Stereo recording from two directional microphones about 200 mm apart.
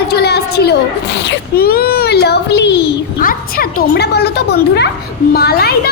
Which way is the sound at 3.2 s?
45° left (ahead or behind).